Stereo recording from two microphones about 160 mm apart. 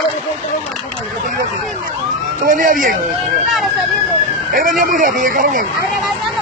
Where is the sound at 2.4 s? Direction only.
55° right (ahead or behind).